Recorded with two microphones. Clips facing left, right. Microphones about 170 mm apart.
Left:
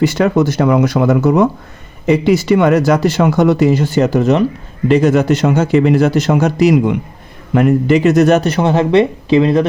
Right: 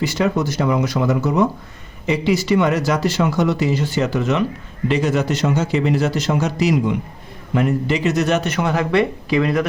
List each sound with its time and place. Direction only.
0.0 s a man's voice: 60° left (ahead or behind); by 4.4 s 40° left (ahead or behind)
4.9 s a man's voice: 50° left (ahead or behind); by 9.6 s 25° left (ahead or behind)